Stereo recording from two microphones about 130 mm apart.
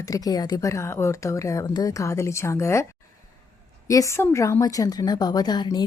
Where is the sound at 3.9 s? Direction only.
25° left (ahead or behind).